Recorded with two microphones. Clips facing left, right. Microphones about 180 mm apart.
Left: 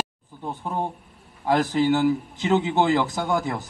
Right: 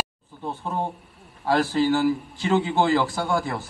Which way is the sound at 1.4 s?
20° left (ahead or behind).